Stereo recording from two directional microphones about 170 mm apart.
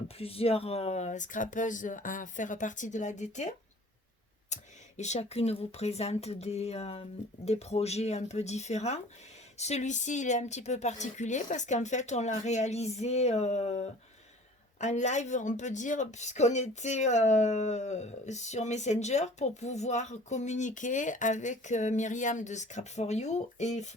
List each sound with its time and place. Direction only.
0.2 s speech: 35° left (ahead or behind)